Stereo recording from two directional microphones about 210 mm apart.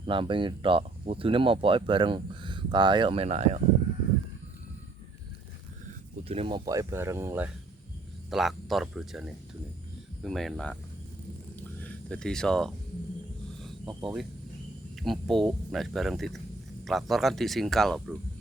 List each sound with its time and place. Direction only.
0.0 s speech: 25° right (ahead or behind)
6.2 s speech: 25° right (ahead or behind); by 10.8 s centre (ahead or behind)
11.8 s speech: 5° left (ahead or behind)
14.9 s speech: centre (ahead or behind)